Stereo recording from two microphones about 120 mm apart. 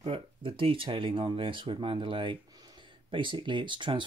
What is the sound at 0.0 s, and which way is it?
Speech, 50° right (ahead or behind).